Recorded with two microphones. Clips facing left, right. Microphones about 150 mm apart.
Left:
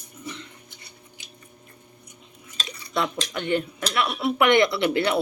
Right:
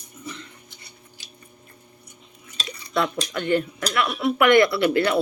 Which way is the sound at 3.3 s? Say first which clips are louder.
Right 3 dB; 20° left (ahead or behind).